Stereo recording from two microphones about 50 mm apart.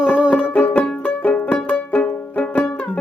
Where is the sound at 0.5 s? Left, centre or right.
Left.